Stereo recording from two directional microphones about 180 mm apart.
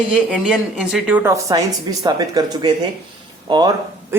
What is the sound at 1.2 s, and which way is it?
A woman's voice, 15° right (ahead or behind).